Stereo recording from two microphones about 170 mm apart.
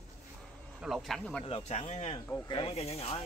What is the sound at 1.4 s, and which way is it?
Speech, 35° left (ahead or behind).